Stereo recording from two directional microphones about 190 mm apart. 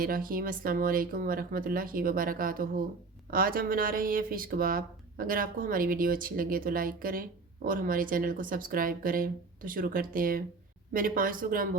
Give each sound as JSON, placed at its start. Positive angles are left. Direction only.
{"t": 0.0, "sound": "speech", "side_deg": -50}